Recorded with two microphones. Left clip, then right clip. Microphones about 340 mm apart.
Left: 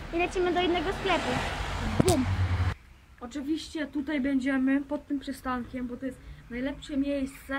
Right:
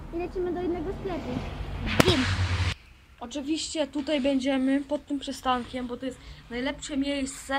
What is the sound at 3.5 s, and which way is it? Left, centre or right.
A woman's voice, centre.